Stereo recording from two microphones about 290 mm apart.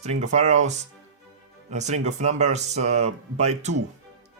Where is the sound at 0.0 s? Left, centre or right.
Right.